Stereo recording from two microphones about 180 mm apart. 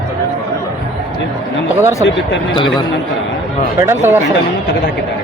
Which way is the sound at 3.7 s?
15° right (ahead or behind).